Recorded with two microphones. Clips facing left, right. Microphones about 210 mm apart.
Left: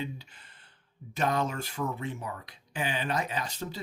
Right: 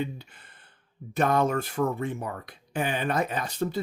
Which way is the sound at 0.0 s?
55° right (ahead or behind).